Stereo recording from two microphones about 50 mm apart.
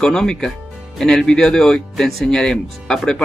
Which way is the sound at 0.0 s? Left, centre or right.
Centre.